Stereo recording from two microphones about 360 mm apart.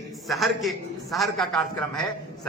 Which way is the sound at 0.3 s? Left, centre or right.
Centre.